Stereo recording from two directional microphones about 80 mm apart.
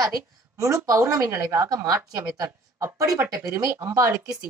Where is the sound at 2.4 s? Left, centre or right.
Right.